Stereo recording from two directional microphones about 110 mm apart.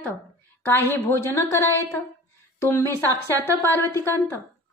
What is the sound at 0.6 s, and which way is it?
A woman's voice, 20° left (ahead or behind).